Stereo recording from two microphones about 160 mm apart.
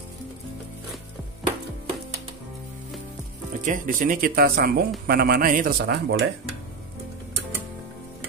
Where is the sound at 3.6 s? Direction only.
55° right (ahead or behind).